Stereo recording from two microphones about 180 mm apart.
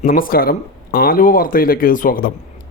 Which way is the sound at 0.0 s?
50° left (ahead or behind).